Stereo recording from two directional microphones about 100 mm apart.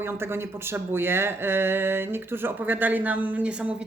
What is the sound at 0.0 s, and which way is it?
Speech, 25° right (ahead or behind).